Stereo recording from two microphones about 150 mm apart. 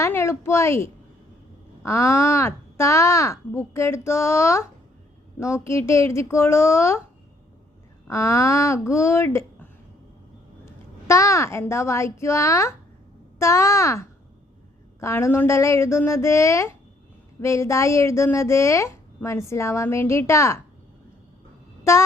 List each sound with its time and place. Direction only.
0.0 s a woman's voice: 15° left (ahead or behind)
8.0 s a woman's voice: 20° left (ahead or behind)
11.1 s a woman's voice: 20° left (ahead or behind)